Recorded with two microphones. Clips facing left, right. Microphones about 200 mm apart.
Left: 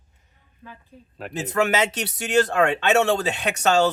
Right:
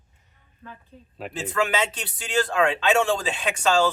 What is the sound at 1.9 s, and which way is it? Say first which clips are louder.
Speech: left 6 dB; 70° left (ahead or behind).